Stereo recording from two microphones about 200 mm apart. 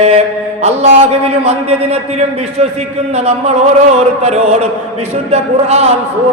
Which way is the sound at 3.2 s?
30° right (ahead or behind).